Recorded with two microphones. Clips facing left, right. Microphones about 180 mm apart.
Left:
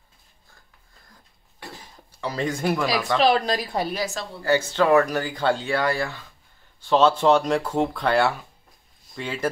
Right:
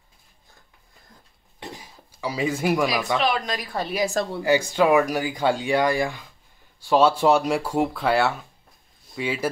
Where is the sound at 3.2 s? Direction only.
35° left (ahead or behind).